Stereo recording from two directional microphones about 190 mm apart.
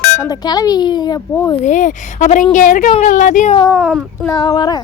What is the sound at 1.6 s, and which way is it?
A woman's voice, 40° left (ahead or behind).